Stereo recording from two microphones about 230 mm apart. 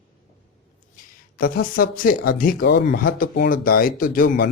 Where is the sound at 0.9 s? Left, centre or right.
Left.